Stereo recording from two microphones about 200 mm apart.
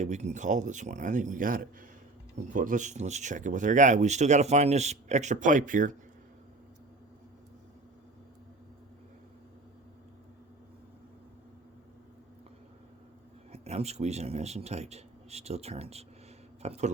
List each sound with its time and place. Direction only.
0.0 s speech: 35° right (ahead or behind)
13.5 s speech: 30° right (ahead or behind)